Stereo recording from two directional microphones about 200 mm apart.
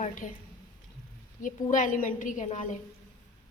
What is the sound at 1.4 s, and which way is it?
A woman's voice, 40° left (ahead or behind).